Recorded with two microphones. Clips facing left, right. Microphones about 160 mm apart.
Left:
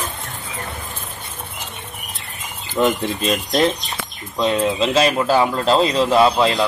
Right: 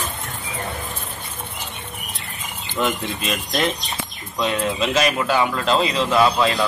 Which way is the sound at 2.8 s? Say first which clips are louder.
Left 5 dB; 35° left (ahead or behind).